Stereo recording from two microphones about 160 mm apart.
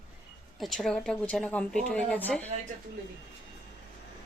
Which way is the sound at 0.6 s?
Centre (ahead or behind).